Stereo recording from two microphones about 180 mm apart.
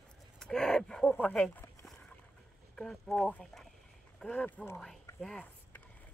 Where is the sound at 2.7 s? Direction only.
Centre (ahead or behind).